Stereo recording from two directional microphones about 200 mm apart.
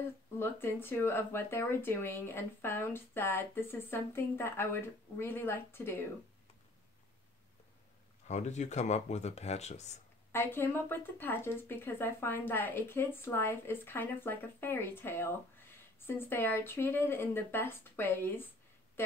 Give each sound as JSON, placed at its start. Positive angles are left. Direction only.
{"t": 0.4, "sound": "speech", "side_deg": 10}
{"t": 8.3, "sound": "speech", "side_deg": 35}
{"t": 10.3, "sound": "speech", "side_deg": 10}